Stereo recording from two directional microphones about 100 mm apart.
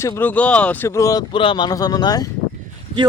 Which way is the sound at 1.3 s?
55° left (ahead or behind).